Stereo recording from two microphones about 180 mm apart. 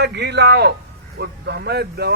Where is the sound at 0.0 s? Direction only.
70° right (ahead or behind).